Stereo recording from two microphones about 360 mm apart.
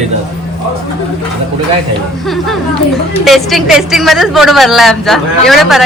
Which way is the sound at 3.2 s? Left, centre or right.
Centre.